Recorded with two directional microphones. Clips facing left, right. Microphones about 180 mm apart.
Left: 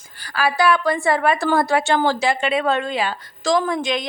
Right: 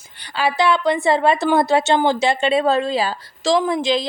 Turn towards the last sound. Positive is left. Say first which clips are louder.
# right 3 dB
turn(degrees=-30)  # may be behind; listen again after turning